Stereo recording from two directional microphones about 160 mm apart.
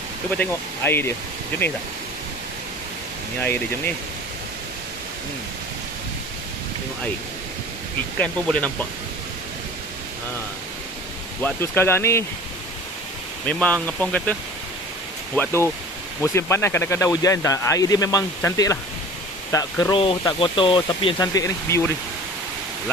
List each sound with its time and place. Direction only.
0.3 s speech: 10° left (ahead or behind)
8.2 s speech: 10° left (ahead or behind)
11.4 s speech: 15° left (ahead or behind)
13.5 s speech: 10° left (ahead or behind)
15.3 s speech: 15° left (ahead or behind)
20.0 s speech: 35° left (ahead or behind); by 21.9 s 20° left (ahead or behind)